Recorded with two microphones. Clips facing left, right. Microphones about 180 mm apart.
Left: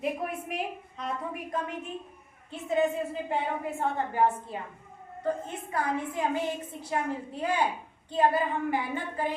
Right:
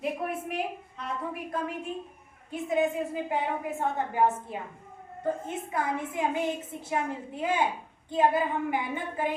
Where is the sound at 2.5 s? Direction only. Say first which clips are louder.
Even; 15° right (ahead or behind).